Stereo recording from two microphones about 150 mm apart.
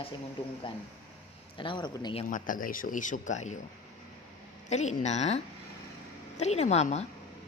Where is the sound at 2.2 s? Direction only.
65° left (ahead or behind).